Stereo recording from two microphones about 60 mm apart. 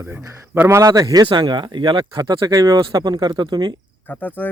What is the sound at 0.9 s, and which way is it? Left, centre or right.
Speech, right.